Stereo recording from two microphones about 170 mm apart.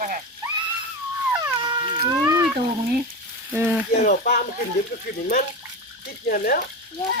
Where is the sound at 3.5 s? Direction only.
10° right (ahead or behind).